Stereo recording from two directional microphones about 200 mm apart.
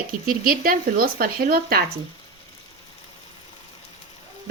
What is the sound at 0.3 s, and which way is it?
A woman's voice, 45° right (ahead or behind).